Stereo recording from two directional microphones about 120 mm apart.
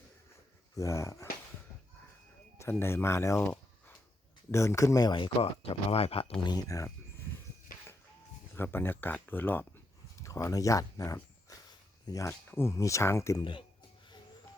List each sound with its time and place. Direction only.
0.8 s speech: 25° left (ahead or behind)
2.6 s speech: 20° left (ahead or behind)
5.1 s speech: 50° left (ahead or behind)
6.4 s speech: 35° left (ahead or behind)
8.5 s speech: 20° left (ahead or behind)
13.4 s speech: 45° left (ahead or behind)